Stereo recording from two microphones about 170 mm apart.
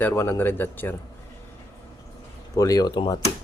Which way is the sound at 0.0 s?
15° left (ahead or behind).